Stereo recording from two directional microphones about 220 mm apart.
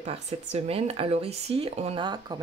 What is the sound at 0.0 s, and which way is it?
Speech, 30° right (ahead or behind).